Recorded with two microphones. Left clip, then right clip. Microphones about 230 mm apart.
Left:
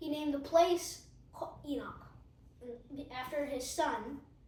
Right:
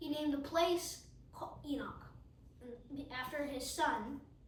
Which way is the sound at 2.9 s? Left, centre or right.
Right.